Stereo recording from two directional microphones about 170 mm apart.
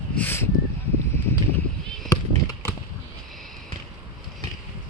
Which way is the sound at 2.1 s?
15° left (ahead or behind).